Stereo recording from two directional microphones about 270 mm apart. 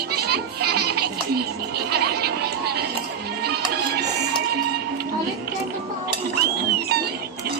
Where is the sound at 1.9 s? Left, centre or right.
Right.